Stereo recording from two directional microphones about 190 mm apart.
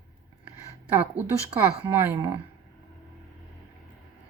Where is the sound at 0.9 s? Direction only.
10° right (ahead or behind).